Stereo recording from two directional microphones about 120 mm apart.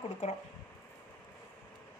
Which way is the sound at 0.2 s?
70° left (ahead or behind).